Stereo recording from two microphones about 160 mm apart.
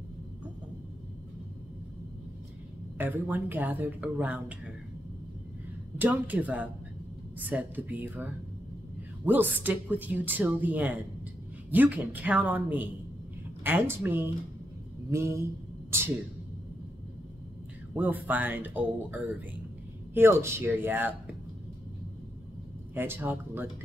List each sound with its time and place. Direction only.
3.0 s speech: 10° right (ahead or behind)
5.9 s speech: 10° right (ahead or behind)
15.9 s a sound: 15° right (ahead or behind)
17.9 s speech: 10° right (ahead or behind)
22.9 s speech: 15° right (ahead or behind)